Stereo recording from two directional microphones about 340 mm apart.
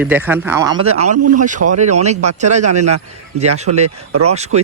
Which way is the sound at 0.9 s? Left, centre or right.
Right.